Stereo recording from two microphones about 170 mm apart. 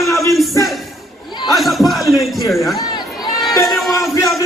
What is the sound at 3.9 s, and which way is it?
Music, 20° left (ahead or behind).